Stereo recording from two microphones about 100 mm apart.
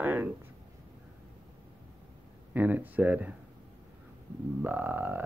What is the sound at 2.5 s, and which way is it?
Speech, 15° right (ahead or behind).